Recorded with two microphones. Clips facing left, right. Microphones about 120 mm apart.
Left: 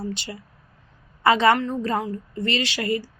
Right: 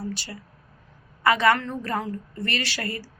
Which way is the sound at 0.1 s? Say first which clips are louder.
Left 2 dB; 20° left (ahead or behind).